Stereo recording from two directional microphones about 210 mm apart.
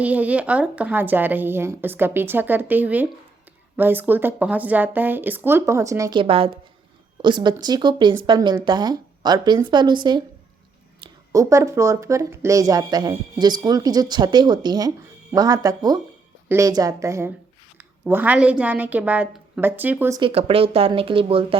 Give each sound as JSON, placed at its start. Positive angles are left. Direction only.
{"t": 0.0, "sound": "speech", "side_deg": -5}